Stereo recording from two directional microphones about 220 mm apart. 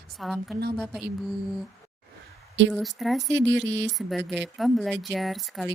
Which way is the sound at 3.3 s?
55° right (ahead or behind).